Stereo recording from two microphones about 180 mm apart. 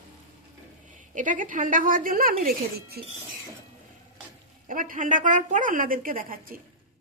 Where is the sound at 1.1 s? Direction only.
45° right (ahead or behind).